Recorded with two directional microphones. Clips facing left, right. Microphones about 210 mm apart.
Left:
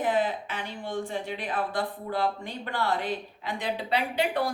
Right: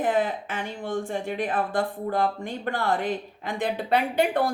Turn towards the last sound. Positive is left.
turn(degrees=-50)  # may be behind; listen again after turning